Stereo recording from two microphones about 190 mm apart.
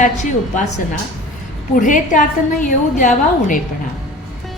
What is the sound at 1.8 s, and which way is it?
A woman's voice, 45° left (ahead or behind).